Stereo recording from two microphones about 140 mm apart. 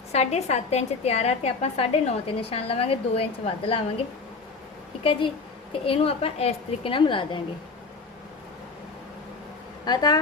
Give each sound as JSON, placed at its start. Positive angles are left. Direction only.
{"t": 0.1, "sound": "a woman's voice", "side_deg": 50}
{"t": 5.8, "sound": "a woman's voice", "side_deg": 40}
{"t": 9.8, "sound": "speech", "side_deg": 30}